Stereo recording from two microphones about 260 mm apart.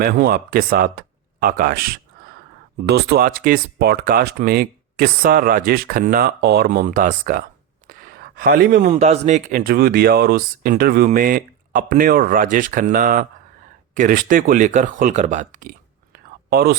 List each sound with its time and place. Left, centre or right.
0.0 s speech: right
7.9 s a sound: right
8.9 s speech: right
16.1 s whispering: right